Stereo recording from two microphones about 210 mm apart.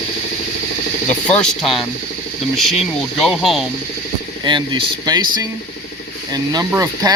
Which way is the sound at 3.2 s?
Centre (ahead or behind).